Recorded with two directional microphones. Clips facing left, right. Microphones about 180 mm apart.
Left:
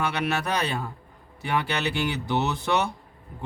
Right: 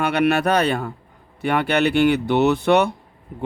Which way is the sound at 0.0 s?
60° right (ahead or behind).